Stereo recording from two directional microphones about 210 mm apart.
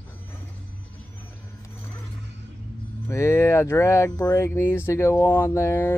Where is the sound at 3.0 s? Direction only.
15° left (ahead or behind).